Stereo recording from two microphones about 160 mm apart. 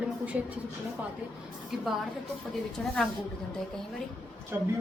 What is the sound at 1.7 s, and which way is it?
A woman's voice, centre (ahead or behind).